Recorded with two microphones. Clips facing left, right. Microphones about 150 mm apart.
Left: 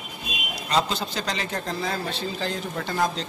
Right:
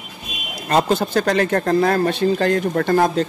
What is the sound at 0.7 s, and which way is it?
A man's voice, 50° right (ahead or behind).